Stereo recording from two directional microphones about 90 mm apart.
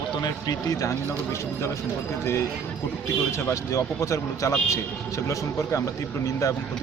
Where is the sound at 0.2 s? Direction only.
45° left (ahead or behind).